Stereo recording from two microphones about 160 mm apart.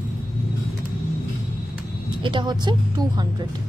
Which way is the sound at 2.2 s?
30° right (ahead or behind).